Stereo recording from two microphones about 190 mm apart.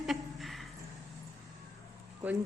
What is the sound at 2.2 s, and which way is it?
Speech, 10° right (ahead or behind).